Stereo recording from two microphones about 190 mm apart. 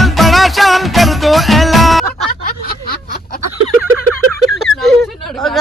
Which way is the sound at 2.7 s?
50° left (ahead or behind).